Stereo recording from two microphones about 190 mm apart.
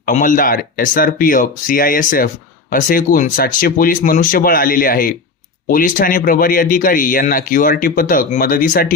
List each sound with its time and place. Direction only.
0.0 s speech: 45° left (ahead or behind)